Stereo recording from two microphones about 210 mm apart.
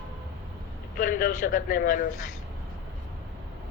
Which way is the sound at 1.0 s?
40° left (ahead or behind).